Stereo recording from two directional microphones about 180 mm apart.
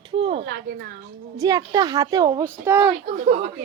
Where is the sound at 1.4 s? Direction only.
20° right (ahead or behind).